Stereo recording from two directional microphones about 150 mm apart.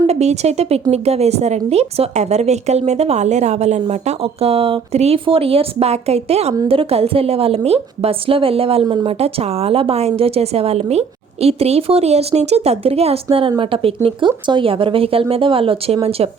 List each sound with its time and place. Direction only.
0.1 s a woman's voice: 45° right (ahead or behind)